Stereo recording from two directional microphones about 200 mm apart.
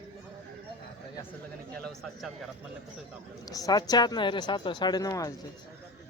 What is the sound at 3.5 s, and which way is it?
Speech, 20° left (ahead or behind).